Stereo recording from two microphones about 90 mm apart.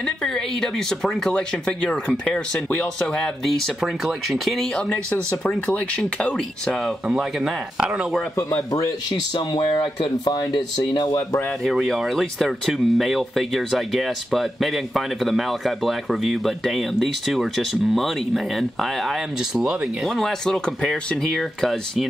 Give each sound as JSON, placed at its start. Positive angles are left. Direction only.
{"t": 0.0, "sound": "speech", "side_deg": 5}
{"t": 6.7, "sound": "speech", "side_deg": -5}
{"t": 8.5, "sound": "speech", "side_deg": 45}
{"t": 10.2, "sound": "speech", "side_deg": 50}
{"t": 10.8, "sound": "speech", "side_deg": 60}
{"t": 11.6, "sound": "speech", "side_deg": 0}
{"t": 20.1, "sound": "speech", "side_deg": 5}